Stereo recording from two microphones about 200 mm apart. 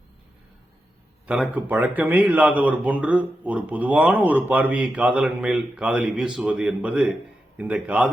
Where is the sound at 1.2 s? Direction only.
5° right (ahead or behind).